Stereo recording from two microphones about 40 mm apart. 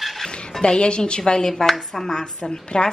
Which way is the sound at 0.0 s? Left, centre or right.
Centre.